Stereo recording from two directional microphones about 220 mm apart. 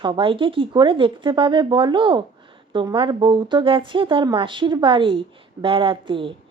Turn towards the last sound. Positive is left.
turn(degrees=-25)  # may be behind; listen again after turning